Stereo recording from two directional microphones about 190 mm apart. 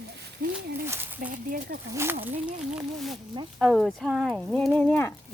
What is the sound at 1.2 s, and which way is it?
Speech, 50° right (ahead or behind).